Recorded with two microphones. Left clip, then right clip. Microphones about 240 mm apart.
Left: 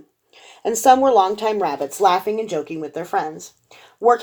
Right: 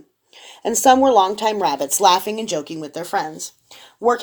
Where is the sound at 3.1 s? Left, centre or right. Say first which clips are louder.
Even; right.